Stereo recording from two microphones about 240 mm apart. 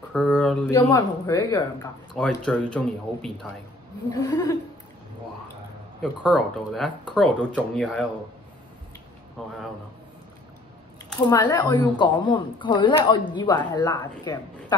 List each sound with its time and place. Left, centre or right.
0.1 s speech: centre
0.7 s speech: centre
4.1 s speech: centre
6.2 s speech: centre
11.2 s speech: centre